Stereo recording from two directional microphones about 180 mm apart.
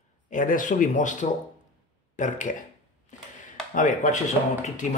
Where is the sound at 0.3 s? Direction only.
45° left (ahead or behind).